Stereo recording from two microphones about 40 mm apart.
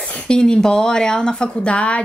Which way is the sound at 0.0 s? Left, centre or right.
Left.